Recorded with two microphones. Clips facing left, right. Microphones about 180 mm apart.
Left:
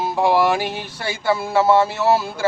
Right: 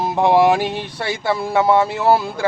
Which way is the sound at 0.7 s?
5° left (ahead or behind).